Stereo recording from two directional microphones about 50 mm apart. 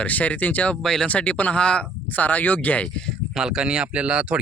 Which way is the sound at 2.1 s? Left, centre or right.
Left.